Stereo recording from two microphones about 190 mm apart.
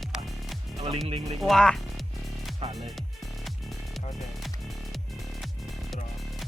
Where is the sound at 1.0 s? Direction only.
30° right (ahead or behind).